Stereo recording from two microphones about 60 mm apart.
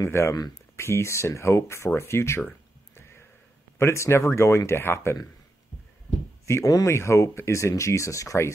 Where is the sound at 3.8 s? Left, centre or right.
Left.